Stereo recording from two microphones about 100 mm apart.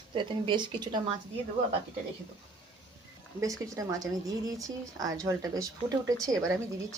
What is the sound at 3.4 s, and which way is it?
Speech, 35° right (ahead or behind).